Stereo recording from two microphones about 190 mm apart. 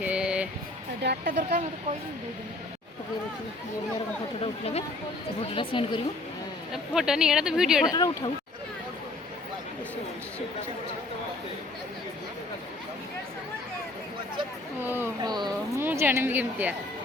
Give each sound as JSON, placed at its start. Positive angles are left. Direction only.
{"t": 0.0, "sound": "music", "side_deg": -5}
{"t": 1.0, "sound": "speech", "side_deg": -55}
{"t": 5.4, "sound": "speech", "side_deg": 25}
{"t": 6.9, "sound": "speech", "side_deg": -5}
{"t": 7.9, "sound": "speech", "side_deg": 20}
{"t": 14.8, "sound": "a sound", "side_deg": -10}